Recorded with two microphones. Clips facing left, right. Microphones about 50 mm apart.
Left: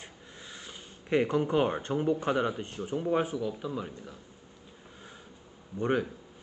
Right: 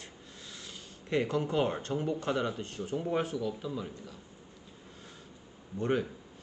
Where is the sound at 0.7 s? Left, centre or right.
Left.